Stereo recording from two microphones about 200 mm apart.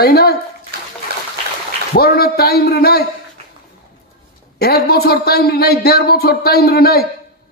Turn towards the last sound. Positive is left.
turn(degrees=50)  # may be behind; listen again after turning